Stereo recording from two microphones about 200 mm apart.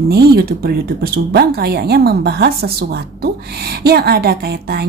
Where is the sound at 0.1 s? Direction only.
50° right (ahead or behind).